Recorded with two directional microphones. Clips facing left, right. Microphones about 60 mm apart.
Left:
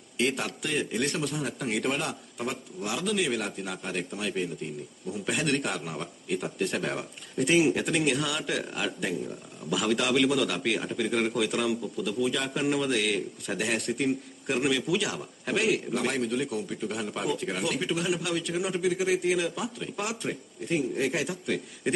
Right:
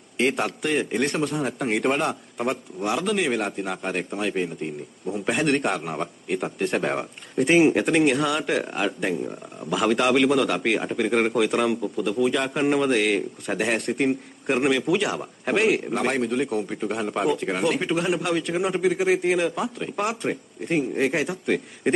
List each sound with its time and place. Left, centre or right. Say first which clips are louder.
0.2 s a man's voice: right 6 dB; right